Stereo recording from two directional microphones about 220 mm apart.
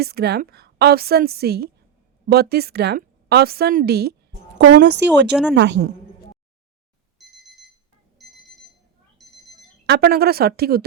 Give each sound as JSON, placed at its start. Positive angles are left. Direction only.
{"t": 0.0, "sound": "a woman's voice", "side_deg": -45}
{"t": 5.3, "sound": "a woman's voice", "side_deg": -5}
{"t": 5.5, "sound": "a woman's voice", "side_deg": -50}
{"t": 7.2, "sound": "alarm clock", "side_deg": 0}
{"t": 9.2, "sound": "a sound", "side_deg": 0}
{"t": 9.8, "sound": "a woman's voice", "side_deg": -45}